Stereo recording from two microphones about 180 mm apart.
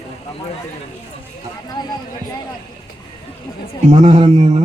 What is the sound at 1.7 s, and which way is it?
Speech, 25° left (ahead or behind).